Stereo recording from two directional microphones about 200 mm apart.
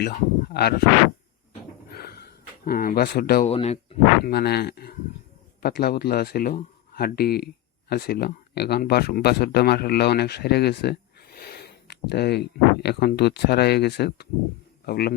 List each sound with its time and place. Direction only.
0.0 s speech: 50° left (ahead or behind)
1.9 s a sound: 50° left (ahead or behind)
3.4 s speech: 30° left (ahead or behind)
4.2 s a man's voice: 55° left (ahead or behind)